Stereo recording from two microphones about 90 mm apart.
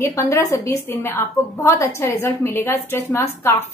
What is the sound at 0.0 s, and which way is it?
A woman's voice, 35° left (ahead or behind).